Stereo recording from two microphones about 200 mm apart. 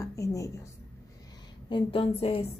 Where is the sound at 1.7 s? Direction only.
25° left (ahead or behind).